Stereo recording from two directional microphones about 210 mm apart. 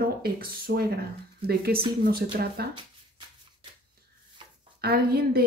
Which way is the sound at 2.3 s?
50° right (ahead or behind).